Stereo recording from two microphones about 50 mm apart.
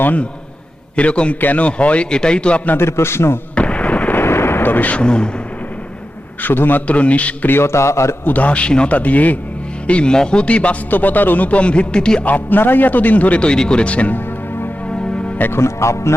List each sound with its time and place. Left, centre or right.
0.0 s speech: left
2.7 s a man's voice: left
3.5 s artillery fire: left
4.3 s speech: left; by 5.3 s centre
6.4 s speech: left
7.4 s music: left
8.2 s speech: left
10.9 s speech: left; by 12.2 s centre
12.2 s speech: left
13.4 s speech: centre
15.5 s music: left